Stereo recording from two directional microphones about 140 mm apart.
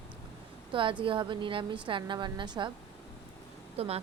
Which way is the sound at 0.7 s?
40° right (ahead or behind).